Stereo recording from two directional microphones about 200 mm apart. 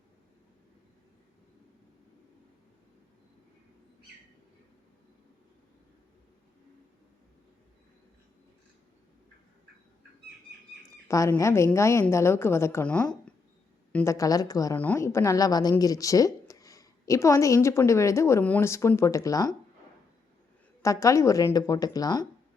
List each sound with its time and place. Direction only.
11.1 s a woman's voice: 15° left (ahead or behind)
20.8 s a woman's voice: 15° left (ahead or behind)